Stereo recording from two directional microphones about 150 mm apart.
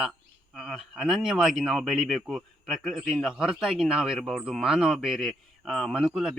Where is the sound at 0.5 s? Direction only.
Centre (ahead or behind).